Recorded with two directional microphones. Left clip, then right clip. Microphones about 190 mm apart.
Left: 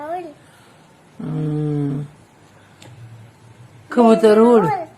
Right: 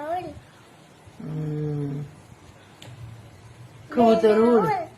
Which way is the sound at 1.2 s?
50° left (ahead or behind).